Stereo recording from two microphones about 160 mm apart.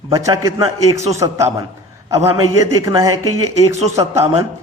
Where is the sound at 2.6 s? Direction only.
20° right (ahead or behind).